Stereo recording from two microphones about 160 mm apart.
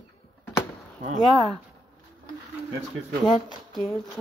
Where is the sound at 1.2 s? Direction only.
Centre (ahead or behind).